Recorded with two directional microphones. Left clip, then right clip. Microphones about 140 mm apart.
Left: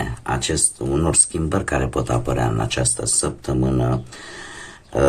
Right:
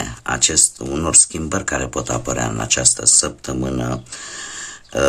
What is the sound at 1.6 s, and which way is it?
Speech, 20° right (ahead or behind).